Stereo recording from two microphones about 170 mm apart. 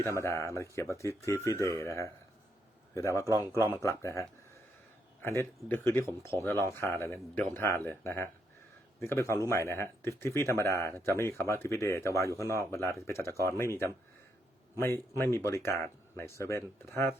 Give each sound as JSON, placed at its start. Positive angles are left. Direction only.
{"t": 0.2, "sound": "speech", "side_deg": 15}
{"t": 3.2, "sound": "a man's voice", "side_deg": -15}
{"t": 3.7, "sound": "speech", "side_deg": 20}